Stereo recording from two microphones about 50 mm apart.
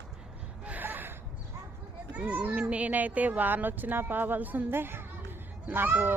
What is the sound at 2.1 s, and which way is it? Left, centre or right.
A child's voice, right.